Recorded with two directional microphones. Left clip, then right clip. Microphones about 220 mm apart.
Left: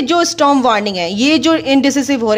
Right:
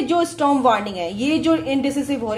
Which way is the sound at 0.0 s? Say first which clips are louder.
Left 6 dB; 40° left (ahead or behind).